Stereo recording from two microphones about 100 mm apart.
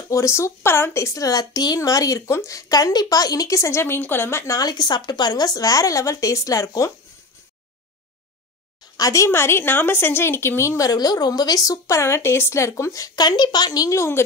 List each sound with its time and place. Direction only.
0.1 s a woman's voice: 30° left (ahead or behind)
8.9 s a woman's voice: 35° left (ahead or behind)